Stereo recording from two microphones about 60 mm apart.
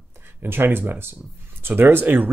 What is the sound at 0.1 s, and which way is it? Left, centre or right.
Speech, right.